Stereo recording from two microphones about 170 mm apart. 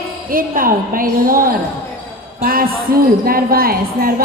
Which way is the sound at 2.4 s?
60° right (ahead or behind).